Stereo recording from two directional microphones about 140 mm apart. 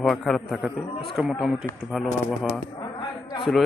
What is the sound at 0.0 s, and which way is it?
A man's voice, centre (ahead or behind).